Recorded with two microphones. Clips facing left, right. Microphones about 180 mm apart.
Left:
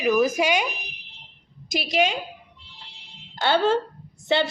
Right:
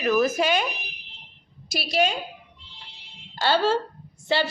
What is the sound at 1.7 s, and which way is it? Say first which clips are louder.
Speech: left 1 dB; 15° left (ahead or behind).